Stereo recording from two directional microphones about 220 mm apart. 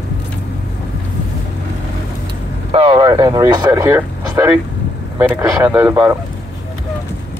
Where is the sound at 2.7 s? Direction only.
25° right (ahead or behind).